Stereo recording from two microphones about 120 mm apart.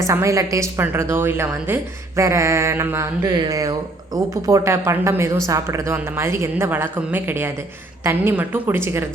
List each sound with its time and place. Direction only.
0.0 s a woman's voice: 25° right (ahead or behind)
3.3 s a woman's voice: 35° right (ahead or behind)